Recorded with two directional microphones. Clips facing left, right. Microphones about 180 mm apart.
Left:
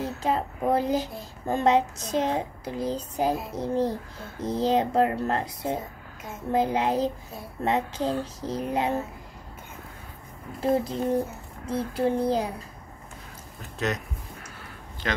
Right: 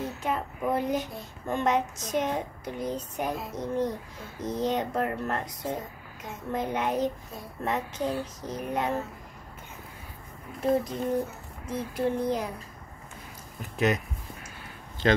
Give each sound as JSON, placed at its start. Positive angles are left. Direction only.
{"t": 0.2, "sound": "a child's voice", "side_deg": 30}
{"t": 10.6, "sound": "a child's voice", "side_deg": 30}
{"t": 13.6, "sound": "speech", "side_deg": -10}
{"t": 15.0, "sound": "speech", "side_deg": -30}